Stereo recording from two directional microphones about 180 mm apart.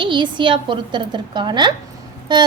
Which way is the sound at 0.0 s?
25° right (ahead or behind).